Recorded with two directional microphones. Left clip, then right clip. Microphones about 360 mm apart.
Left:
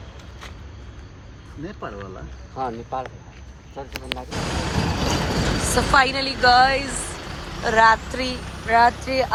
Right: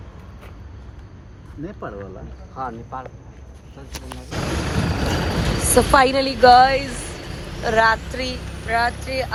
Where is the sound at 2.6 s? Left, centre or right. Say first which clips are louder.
Left 2 dB; left.